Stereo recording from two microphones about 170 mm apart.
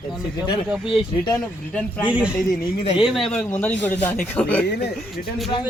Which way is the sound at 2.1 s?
5° right (ahead or behind).